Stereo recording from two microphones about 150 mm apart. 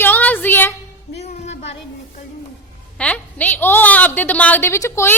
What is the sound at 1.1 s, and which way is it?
Music, 45° left (ahead or behind).